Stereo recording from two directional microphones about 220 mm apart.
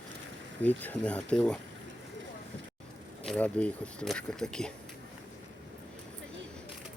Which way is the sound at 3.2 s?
5° left (ahead or behind).